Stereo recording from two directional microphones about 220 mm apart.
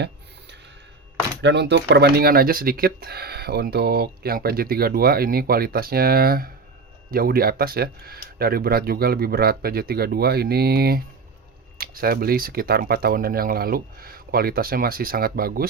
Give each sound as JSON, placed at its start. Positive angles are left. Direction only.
{"t": 1.4, "sound": "speech", "side_deg": -50}